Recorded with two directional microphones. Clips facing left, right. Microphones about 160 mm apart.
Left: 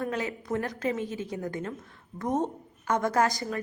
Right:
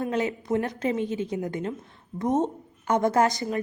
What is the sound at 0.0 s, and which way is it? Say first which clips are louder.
A woman's voice: right 5 dB; 25° right (ahead or behind).